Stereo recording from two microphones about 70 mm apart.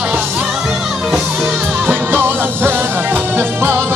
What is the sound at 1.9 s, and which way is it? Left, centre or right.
Music, right.